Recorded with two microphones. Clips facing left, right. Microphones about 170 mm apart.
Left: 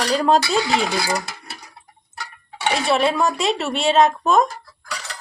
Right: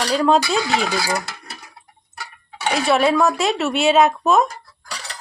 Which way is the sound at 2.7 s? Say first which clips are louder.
Right 3 dB; centre (ahead or behind).